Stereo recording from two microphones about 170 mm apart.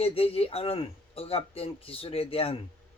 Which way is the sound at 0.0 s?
35° left (ahead or behind).